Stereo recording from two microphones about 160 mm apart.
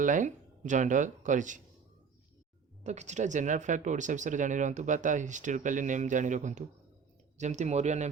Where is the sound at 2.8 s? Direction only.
45° right (ahead or behind).